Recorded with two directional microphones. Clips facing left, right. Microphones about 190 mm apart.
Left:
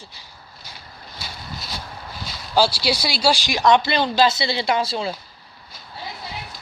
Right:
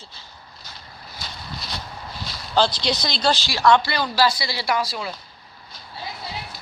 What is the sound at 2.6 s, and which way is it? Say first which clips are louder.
Speech: left 1 dB; 10° left (ahead or behind).